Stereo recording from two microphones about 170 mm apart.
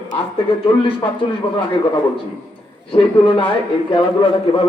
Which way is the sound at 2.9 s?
30° left (ahead or behind).